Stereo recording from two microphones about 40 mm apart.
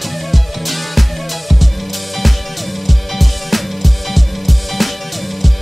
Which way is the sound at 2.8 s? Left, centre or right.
Centre.